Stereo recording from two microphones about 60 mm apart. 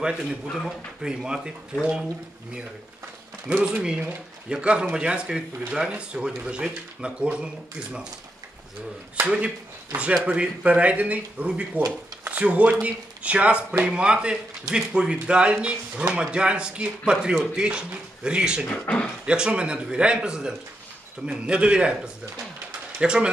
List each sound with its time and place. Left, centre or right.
0.7 s speech: centre
3.5 s speech: centre
9.2 s speech: right
18.7 s speech: centre
19.2 s speech: centre